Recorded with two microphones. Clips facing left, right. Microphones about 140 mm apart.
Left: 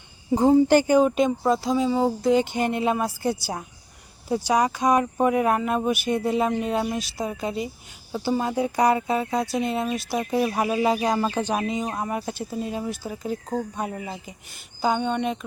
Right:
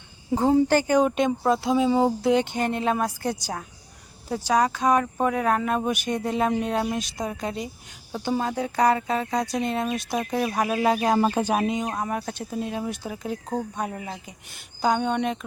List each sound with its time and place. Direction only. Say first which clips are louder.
0.7 s speech: left 3 dB; 15° left (ahead or behind)
0.9 s speech: left 2 dB; centre (ahead or behind)
2.6 s speech: left 1 dB; 10° left (ahead or behind)
11.3 s speech: right 2 dB; 10° right (ahead or behind)
11.7 s speech: even; centre (ahead or behind)